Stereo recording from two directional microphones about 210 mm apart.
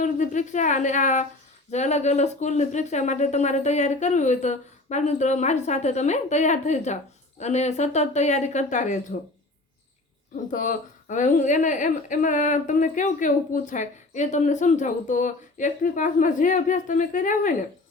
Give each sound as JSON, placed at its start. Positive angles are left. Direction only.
{"t": 0.0, "sound": "speech", "side_deg": 35}
{"t": 10.5, "sound": "speech", "side_deg": 40}